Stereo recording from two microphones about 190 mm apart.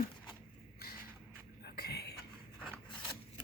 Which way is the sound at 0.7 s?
55° left (ahead or behind).